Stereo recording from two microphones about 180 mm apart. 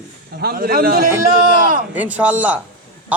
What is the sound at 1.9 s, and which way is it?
Speech, 10° right (ahead or behind).